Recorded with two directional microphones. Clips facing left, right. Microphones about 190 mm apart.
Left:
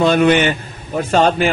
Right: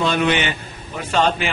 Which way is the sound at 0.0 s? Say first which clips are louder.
Left 7 dB; 50° left (ahead or behind).